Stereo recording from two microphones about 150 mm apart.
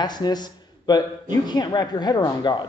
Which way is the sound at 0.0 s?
30° left (ahead or behind).